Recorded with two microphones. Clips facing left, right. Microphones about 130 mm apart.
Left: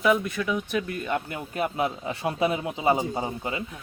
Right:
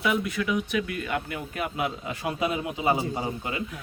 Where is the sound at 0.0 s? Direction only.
35° left (ahead or behind).